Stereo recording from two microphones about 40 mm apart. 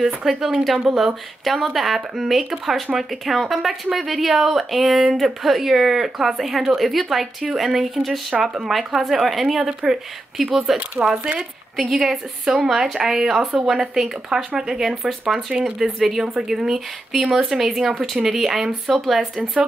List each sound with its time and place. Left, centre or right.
0.0 s speech: centre
11.0 s speech: right
11.9 s speech: centre